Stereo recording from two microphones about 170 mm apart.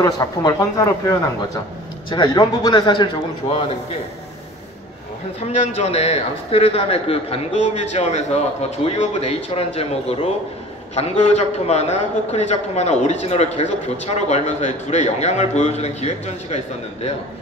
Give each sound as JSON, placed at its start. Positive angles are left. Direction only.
{"t": 0.0, "sound": "speech", "side_deg": 20}
{"t": 5.4, "sound": "a man's voice", "side_deg": 40}